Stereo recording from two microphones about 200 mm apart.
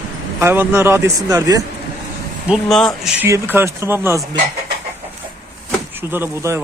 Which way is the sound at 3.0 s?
10° right (ahead or behind).